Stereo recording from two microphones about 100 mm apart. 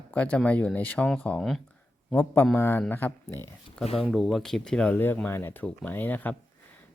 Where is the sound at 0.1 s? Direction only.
15° left (ahead or behind).